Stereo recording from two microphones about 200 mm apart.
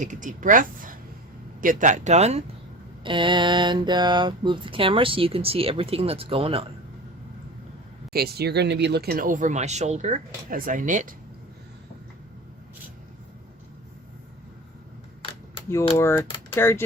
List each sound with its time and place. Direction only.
0.0 s speech: 40° right (ahead or behind)
3.0 s mantra: 25° right (ahead or behind)
8.1 s speech: 50° right (ahead or behind)
16.0 s speech: 10° left (ahead or behind)